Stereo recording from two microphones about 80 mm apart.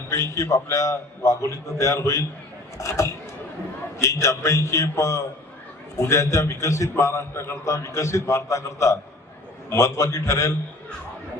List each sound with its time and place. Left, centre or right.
0.3 s a man's voice: left